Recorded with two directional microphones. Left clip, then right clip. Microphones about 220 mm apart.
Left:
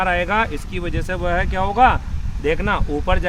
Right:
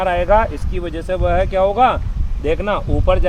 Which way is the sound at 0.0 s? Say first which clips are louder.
Right 4 dB; 25° left (ahead or behind).